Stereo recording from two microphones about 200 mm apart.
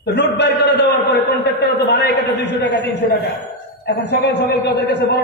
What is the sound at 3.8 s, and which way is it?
A man's voice, 60° left (ahead or behind).